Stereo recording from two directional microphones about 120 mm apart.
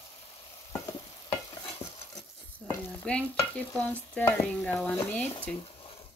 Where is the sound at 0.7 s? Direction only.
30° left (ahead or behind).